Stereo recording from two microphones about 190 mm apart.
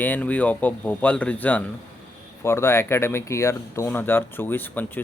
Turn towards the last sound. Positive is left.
turn(degrees=10)  # may be behind; listen again after turning